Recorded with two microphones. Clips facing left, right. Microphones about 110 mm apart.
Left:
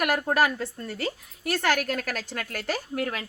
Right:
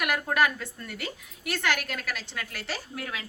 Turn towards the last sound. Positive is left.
turn(degrees=50)  # may be behind; listen again after turning